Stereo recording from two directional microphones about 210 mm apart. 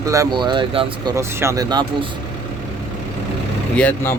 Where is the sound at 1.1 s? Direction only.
15° right (ahead or behind).